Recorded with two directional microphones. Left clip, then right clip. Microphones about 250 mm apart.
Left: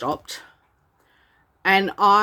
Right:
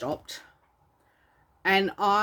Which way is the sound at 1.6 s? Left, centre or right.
Centre.